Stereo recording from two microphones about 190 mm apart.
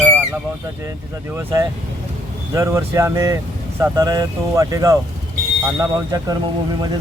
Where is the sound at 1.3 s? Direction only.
15° right (ahead or behind).